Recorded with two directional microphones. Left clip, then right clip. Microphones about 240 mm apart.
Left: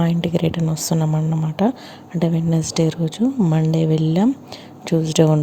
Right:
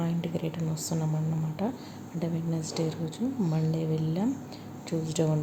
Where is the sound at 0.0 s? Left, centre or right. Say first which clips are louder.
Left 12 dB; left.